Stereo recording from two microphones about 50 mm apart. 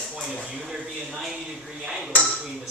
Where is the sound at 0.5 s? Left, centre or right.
Centre.